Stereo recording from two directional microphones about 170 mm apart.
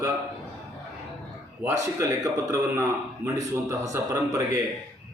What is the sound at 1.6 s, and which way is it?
A man's voice, 20° right (ahead or behind).